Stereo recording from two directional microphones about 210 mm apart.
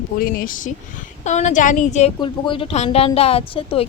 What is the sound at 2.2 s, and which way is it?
A woman's voice, 25° left (ahead or behind).